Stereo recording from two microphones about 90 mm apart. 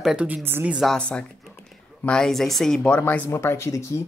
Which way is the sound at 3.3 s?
30° left (ahead or behind).